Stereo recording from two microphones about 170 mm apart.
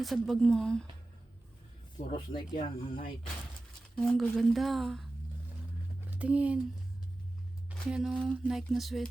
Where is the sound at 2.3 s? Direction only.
30° left (ahead or behind).